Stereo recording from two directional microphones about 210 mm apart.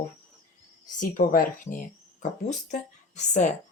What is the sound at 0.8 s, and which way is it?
A woman's voice, 40° left (ahead or behind).